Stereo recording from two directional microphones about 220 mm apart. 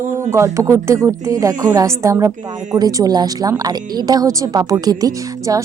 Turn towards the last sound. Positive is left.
turn(degrees=-15)  # may be behind; listen again after turning